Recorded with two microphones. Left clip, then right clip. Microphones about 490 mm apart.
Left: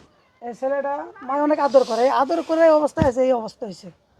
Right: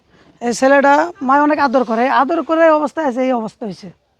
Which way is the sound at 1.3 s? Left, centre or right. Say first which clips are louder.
Right 5 dB; right.